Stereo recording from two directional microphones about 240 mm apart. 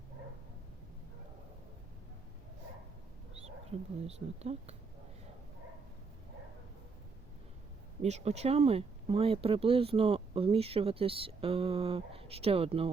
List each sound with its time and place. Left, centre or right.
3.4 s speech: right
8.0 s speech: right